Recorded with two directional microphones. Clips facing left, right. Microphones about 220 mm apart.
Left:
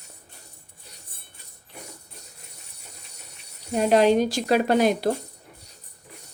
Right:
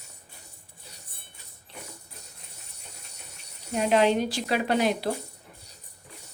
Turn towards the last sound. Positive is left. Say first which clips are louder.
# left 5 dB
turn(degrees=45)  # may be behind; listen again after turning